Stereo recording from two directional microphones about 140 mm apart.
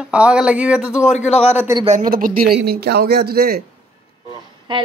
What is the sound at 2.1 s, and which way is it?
A man's voice, 90° right.